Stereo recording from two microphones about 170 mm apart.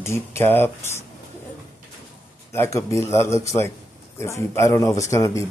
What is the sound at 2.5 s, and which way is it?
Speech, 15° left (ahead or behind).